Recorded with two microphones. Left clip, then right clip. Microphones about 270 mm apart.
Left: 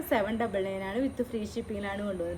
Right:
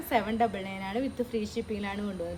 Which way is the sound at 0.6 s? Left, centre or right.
Centre.